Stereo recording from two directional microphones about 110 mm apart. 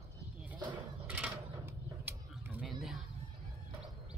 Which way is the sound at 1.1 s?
15° right (ahead or behind).